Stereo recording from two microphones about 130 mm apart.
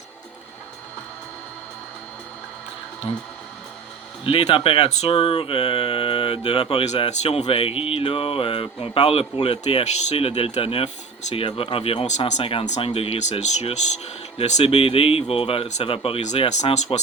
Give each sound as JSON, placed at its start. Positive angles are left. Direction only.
{"t": 3.1, "sound": "speech", "side_deg": 45}
{"t": 12.4, "sound": "speech", "side_deg": 45}
{"t": 12.6, "sound": "speech", "side_deg": 55}